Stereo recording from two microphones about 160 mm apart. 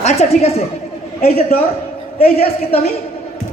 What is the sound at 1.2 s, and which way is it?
A man's voice, 70° left (ahead or behind).